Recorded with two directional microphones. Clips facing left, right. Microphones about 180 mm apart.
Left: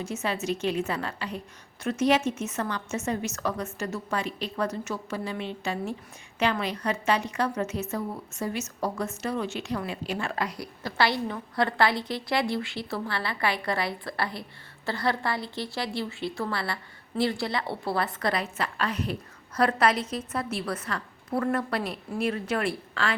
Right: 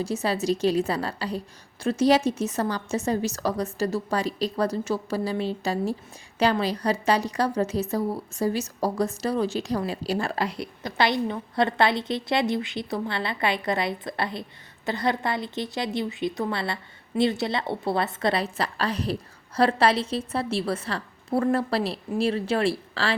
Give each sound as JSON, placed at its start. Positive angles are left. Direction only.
{"t": 0.0, "sound": "a woman's voice", "side_deg": -35}